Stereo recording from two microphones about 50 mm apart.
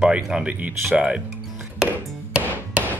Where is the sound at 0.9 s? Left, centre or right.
Centre.